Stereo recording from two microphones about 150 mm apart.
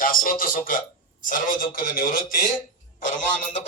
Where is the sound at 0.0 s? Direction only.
70° left (ahead or behind).